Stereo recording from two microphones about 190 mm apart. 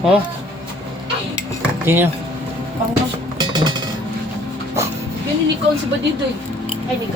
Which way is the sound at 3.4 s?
25° right (ahead or behind).